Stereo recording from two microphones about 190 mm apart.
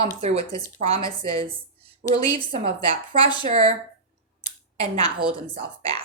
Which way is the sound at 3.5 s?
30° right (ahead or behind).